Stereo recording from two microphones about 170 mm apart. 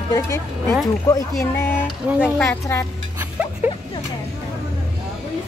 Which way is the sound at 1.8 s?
Centre (ahead or behind).